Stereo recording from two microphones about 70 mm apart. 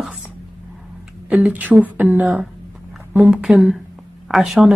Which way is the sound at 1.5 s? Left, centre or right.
Right.